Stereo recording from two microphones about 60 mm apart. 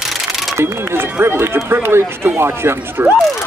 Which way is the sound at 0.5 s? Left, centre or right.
Right.